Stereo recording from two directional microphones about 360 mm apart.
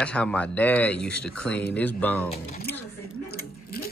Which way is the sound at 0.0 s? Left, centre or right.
Centre.